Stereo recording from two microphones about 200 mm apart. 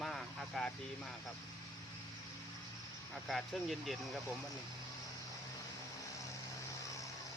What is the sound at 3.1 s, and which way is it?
Speech, centre (ahead or behind).